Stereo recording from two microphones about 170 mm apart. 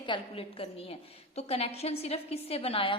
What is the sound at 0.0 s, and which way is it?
A woman's voice, 30° left (ahead or behind).